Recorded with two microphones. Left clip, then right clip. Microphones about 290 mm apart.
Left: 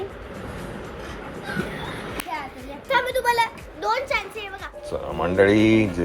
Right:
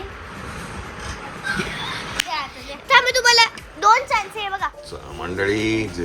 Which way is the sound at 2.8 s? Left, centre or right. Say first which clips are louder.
Right 6 dB; right.